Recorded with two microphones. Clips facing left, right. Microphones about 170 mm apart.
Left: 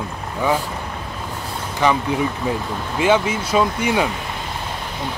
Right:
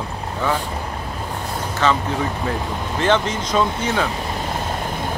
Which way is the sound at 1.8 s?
15° left (ahead or behind).